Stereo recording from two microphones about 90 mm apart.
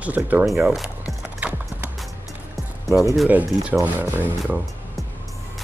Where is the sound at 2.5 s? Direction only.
Centre (ahead or behind).